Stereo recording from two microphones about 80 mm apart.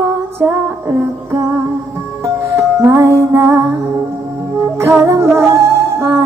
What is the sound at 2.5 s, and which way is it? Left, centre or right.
Music, right.